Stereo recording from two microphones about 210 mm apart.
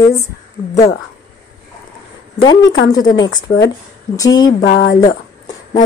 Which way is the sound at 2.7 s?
55° left (ahead or behind).